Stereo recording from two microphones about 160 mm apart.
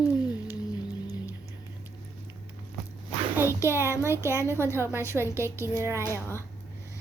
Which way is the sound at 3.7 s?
15° right (ahead or behind).